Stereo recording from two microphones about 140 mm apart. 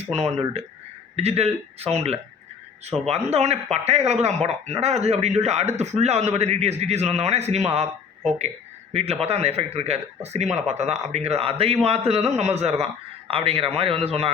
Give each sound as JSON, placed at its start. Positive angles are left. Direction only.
{"t": 0.0, "sound": "speech", "side_deg": -50}
{"t": 8.9, "sound": "a man's voice", "side_deg": -50}